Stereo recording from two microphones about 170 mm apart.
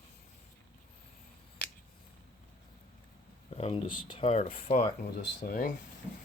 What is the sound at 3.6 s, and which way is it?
Speech, 35° left (ahead or behind).